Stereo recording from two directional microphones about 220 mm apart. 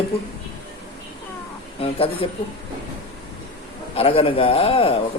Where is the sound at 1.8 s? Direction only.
25° left (ahead or behind).